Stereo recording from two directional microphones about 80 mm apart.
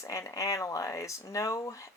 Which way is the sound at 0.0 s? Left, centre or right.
Left.